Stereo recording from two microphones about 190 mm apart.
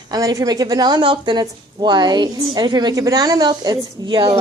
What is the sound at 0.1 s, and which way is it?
A woman's voice, 20° right (ahead or behind).